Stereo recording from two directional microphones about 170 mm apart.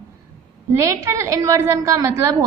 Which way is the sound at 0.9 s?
20° right (ahead or behind).